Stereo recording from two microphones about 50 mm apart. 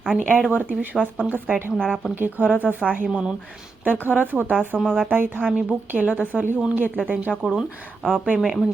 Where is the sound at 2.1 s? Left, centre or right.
Right.